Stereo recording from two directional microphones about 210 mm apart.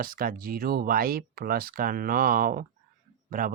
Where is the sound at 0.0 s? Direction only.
40° right (ahead or behind).